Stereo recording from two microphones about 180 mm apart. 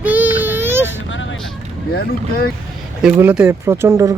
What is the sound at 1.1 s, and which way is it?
Speech, 90° left.